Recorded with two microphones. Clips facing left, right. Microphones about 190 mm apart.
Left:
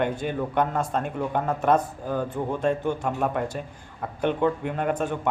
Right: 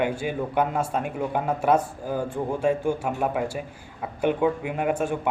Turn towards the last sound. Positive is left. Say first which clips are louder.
# right 1 dB
turn(degrees=-10)  # may be behind; listen again after turning